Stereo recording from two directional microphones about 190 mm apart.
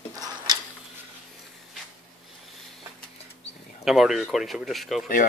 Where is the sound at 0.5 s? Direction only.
20° right (ahead or behind).